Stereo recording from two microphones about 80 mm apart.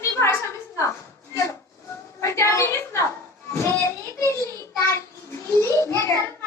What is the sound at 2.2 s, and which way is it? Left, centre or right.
A woman's voice, left.